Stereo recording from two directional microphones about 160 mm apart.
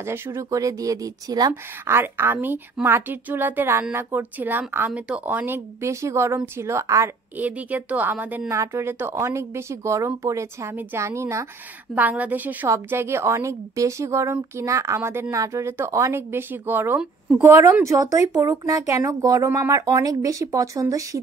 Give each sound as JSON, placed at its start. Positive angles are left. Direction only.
{"t": 0.0, "sound": "a woman's voice", "side_deg": -15}